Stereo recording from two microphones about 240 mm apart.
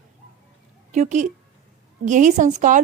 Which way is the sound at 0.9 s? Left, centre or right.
Right.